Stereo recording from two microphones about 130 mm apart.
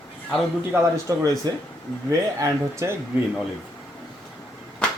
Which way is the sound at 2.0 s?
20° right (ahead or behind).